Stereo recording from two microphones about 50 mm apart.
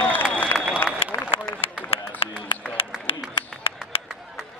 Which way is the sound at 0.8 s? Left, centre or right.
Left.